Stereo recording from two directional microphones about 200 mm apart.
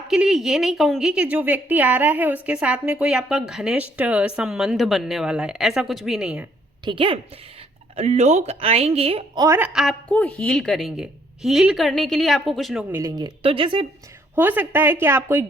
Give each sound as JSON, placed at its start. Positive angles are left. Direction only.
{"t": 0.1, "sound": "a woman's voice", "side_deg": 0}
{"t": 6.8, "sound": "a woman's voice", "side_deg": -25}
{"t": 9.6, "sound": "a woman's voice", "side_deg": -5}
{"t": 12.9, "sound": "speech", "side_deg": -15}
{"t": 14.3, "sound": "speech", "side_deg": -10}